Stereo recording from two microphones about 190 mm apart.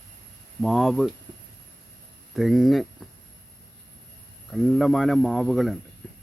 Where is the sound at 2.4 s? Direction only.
Centre (ahead or behind).